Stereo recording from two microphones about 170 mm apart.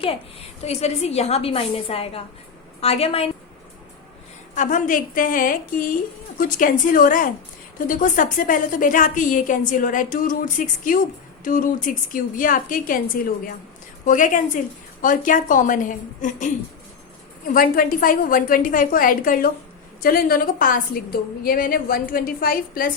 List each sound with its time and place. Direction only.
0.0 s a woman's voice: 35° left (ahead or behind)
4.5 s a woman's voice: 50° left (ahead or behind)
17.5 s a woman's voice: 55° left (ahead or behind)